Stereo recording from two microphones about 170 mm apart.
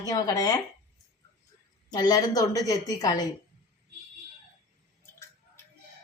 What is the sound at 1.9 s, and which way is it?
A woman's voice, 25° left (ahead or behind).